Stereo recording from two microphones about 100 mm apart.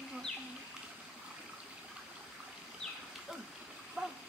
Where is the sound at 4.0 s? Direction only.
5° right (ahead or behind).